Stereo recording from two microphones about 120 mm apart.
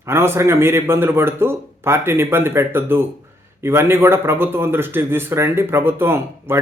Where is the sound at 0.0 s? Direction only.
20° right (ahead or behind).